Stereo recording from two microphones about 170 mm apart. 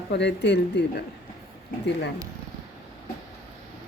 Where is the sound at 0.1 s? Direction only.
85° left.